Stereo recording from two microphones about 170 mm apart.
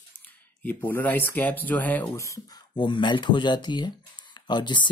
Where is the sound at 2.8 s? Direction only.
30° left (ahead or behind).